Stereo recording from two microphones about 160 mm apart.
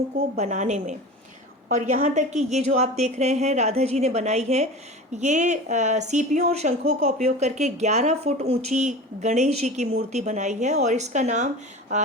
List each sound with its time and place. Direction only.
0.3 s a woman's voice: 50° right (ahead or behind)